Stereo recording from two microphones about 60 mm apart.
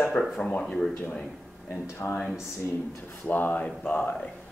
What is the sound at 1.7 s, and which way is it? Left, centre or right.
Speech, left.